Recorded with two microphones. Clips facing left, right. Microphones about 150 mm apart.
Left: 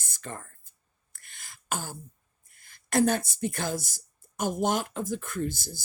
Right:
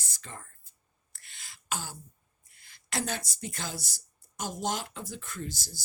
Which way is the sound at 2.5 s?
50° left (ahead or behind).